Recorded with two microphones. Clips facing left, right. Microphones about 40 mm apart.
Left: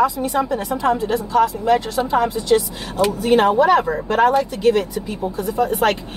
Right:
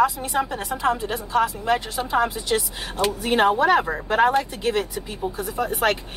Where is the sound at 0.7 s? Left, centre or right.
Centre.